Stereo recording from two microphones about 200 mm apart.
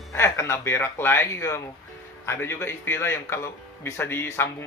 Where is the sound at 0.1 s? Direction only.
15° left (ahead or behind).